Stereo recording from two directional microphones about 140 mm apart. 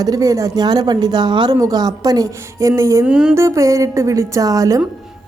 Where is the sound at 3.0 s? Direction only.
5° right (ahead or behind).